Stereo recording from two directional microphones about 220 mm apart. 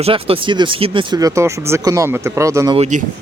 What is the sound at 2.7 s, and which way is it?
Speech, 30° right (ahead or behind).